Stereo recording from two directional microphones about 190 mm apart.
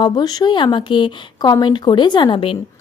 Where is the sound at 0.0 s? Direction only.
20° left (ahead or behind).